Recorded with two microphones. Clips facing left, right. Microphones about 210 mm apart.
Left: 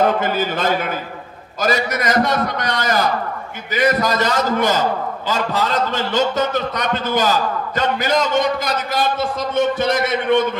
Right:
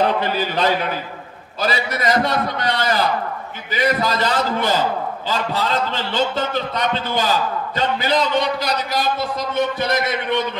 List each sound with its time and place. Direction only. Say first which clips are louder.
0.0 s a man's voice: left 2 dB; 45° left (ahead or behind)